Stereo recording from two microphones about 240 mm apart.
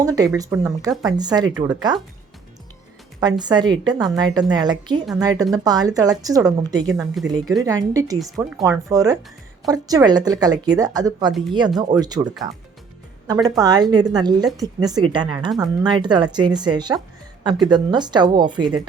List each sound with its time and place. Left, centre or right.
0.0 s a woman's voice: centre
3.2 s a woman's voice: centre
6.9 s speech: centre
7.3 s a woman's voice: centre